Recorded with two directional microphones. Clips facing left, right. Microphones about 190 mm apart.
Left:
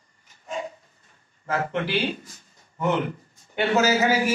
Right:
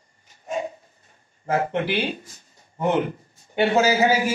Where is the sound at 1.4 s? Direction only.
25° right (ahead or behind).